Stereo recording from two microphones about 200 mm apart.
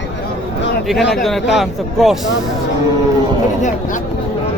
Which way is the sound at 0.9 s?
Centre (ahead or behind).